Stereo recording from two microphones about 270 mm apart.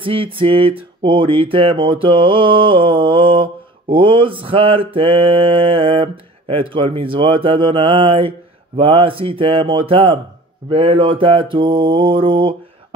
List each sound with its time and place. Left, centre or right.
0.0 s speech: centre